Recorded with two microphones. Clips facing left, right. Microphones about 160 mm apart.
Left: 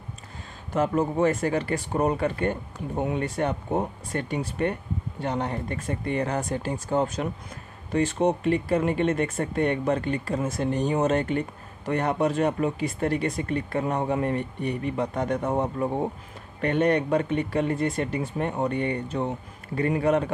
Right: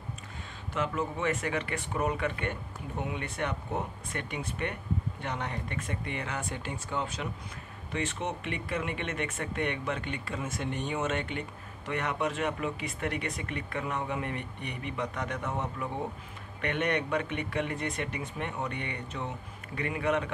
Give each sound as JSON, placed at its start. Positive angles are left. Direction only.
{"t": 0.7, "sound": "speech", "side_deg": 40}